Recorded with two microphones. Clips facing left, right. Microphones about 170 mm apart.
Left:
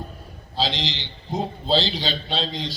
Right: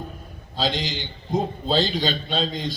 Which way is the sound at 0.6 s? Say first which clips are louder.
Right 1 dB; 50° right (ahead or behind).